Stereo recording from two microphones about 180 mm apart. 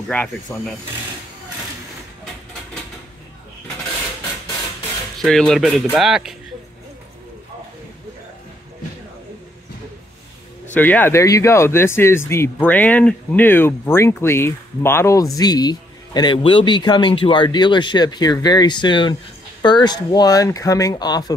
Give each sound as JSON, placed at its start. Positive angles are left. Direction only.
{"t": 0.1, "sound": "speech", "side_deg": 10}
{"t": 5.2, "sound": "speech", "side_deg": 0}
{"t": 10.7, "sound": "speech", "side_deg": 10}